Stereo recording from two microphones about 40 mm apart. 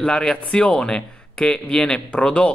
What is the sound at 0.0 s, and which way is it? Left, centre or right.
Speech, left.